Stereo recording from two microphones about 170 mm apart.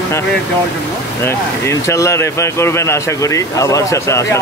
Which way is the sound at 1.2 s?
15° left (ahead or behind).